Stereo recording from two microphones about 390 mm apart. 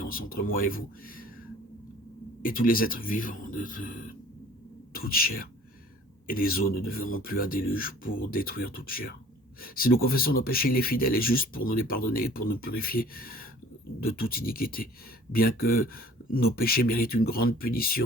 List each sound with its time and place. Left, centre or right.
0.0 s speech: left
2.4 s speech: left